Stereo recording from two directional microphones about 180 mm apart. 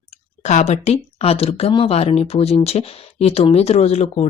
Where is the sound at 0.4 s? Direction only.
40° left (ahead or behind).